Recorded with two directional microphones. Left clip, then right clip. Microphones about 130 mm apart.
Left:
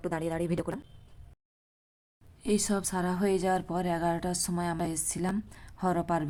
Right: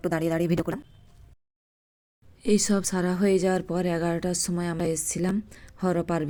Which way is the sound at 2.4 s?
20° right (ahead or behind).